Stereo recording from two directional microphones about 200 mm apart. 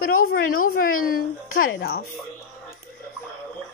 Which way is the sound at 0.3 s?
45° left (ahead or behind).